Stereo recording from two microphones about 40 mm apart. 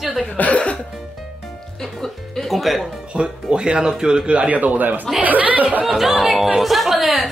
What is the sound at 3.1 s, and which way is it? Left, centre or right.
A man's voice, right.